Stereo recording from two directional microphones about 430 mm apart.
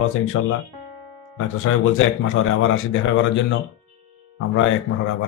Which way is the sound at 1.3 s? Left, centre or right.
Left.